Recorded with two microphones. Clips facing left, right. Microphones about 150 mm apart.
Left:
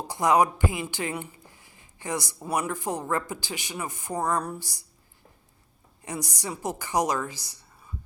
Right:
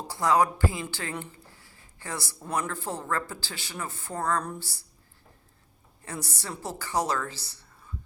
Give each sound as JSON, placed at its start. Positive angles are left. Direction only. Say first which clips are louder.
{"t": 0.1, "sound": "speech", "louder": "left 2 dB", "side_deg": 20}
{"t": 6.1, "sound": "speech", "louder": "left 3 dB", "side_deg": 15}